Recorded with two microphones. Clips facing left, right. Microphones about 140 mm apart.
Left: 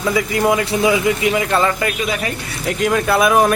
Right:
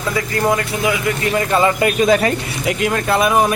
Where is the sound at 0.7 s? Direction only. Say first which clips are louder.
Left 3 dB; 25° left (ahead or behind).